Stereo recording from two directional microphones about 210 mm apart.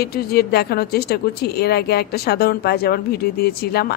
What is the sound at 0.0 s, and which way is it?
Speech, 45° left (ahead or behind).